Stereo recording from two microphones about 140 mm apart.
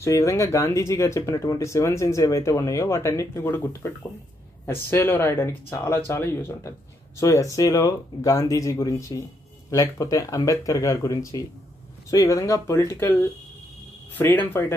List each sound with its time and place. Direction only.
0.0 s speech: 20° left (ahead or behind)